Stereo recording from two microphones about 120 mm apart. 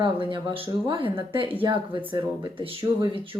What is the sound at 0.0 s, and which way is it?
Speech, 45° right (ahead or behind).